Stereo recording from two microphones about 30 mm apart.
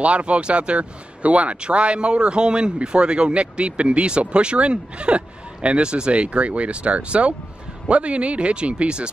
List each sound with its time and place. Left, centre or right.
0.0 s speech: right